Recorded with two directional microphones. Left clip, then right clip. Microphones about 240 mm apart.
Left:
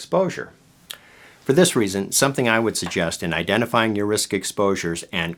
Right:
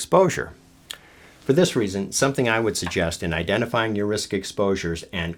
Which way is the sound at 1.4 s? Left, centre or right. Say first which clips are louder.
Left 2 dB; left.